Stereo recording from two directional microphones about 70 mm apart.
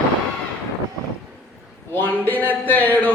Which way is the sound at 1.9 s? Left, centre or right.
Left.